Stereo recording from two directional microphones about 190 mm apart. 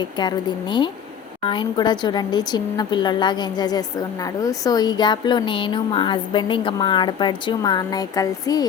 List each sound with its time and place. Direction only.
0.0 s a woman's voice: 25° left (ahead or behind)